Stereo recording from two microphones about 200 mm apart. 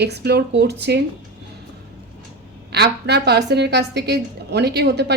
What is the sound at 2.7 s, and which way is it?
A woman's voice, 55° right (ahead or behind).